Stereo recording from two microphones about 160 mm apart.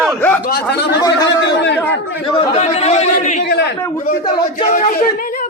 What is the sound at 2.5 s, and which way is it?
Speech, 40° left (ahead or behind).